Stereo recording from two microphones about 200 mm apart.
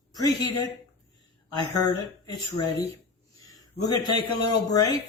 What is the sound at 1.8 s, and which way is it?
Speech, 20° left (ahead or behind).